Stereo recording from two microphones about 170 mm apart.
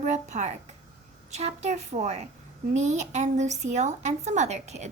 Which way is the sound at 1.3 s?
40° right (ahead or behind).